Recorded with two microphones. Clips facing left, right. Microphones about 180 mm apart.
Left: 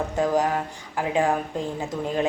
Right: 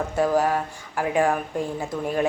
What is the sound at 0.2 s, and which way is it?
A woman's voice, 20° left (ahead or behind).